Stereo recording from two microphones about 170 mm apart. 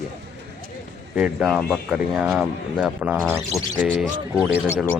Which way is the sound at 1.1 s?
5° right (ahead or behind).